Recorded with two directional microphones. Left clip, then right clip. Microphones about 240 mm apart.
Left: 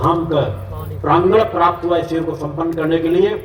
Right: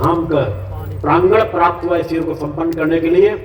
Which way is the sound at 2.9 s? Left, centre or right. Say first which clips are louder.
Right 3 dB; right.